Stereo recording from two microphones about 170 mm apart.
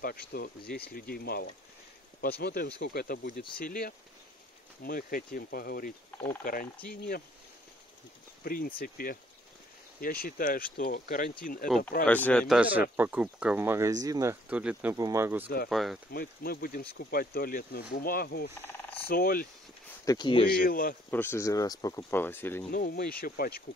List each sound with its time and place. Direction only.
0.0 s speech: 60° left (ahead or behind)
6.1 s speech: 15° left (ahead or behind)
6.4 s speech: 55° left (ahead or behind)
8.5 s speech: 60° left (ahead or behind)
12.1 s speech: 10° left (ahead or behind)
12.4 s speech: 5° right (ahead or behind)
15.7 s speech: centre (ahead or behind)
16.1 s speech: 60° left (ahead or behind)
20.1 s speech: 25° left (ahead or behind)
20.6 s speech: 60° left (ahead or behind)
21.1 s speech: 15° left (ahead or behind)
22.7 s speech: 55° left (ahead or behind)